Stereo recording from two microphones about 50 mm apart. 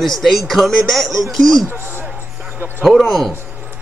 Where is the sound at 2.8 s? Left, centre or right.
Centre.